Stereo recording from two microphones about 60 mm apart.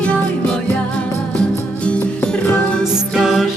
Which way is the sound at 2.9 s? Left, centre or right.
Centre.